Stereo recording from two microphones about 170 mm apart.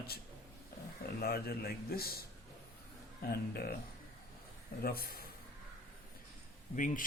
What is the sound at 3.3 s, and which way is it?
Speech, 65° left (ahead or behind).